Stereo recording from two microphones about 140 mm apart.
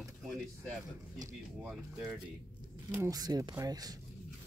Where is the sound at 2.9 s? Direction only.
15° right (ahead or behind).